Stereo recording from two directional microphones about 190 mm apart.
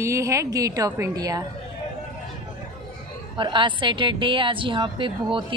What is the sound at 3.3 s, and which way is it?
A woman's voice, 25° right (ahead or behind).